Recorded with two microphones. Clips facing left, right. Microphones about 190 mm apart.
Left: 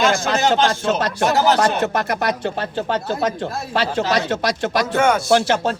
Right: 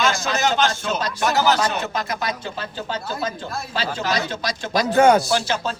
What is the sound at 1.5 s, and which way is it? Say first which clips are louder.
Speech: left 5 dB; 70° left (ahead or behind).